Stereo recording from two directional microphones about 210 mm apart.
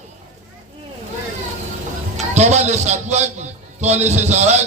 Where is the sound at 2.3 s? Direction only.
35° right (ahead or behind).